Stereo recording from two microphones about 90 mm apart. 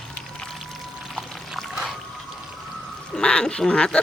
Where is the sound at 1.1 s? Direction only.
Centre (ahead or behind).